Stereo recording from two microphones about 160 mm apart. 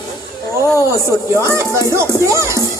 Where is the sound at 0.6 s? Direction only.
20° left (ahead or behind).